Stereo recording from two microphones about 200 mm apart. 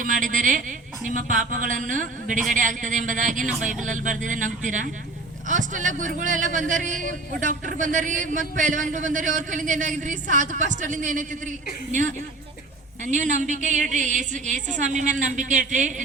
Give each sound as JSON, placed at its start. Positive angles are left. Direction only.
{"t": 0.0, "sound": "a man's voice", "side_deg": -40}